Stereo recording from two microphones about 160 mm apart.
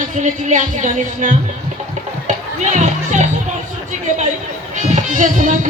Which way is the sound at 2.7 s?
50° right (ahead or behind).